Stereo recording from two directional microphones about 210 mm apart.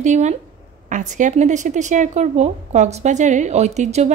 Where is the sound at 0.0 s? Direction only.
35° right (ahead or behind).